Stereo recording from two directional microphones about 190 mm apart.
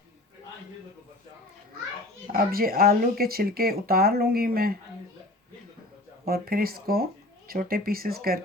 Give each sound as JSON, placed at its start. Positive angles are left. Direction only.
{"t": 2.3, "sound": "speech", "side_deg": -50}
{"t": 6.2, "sound": "speech", "side_deg": -50}